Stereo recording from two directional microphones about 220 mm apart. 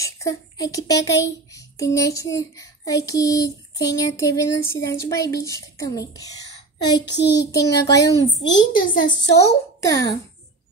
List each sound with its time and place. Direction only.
0.0 s speech: 15° left (ahead or behind)
7.0 s child singing: 50° left (ahead or behind)
7.5 s a woman's voice: 15° left (ahead or behind)